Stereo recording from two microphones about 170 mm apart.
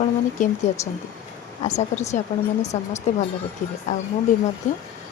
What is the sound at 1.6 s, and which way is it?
Speech, 40° left (ahead or behind).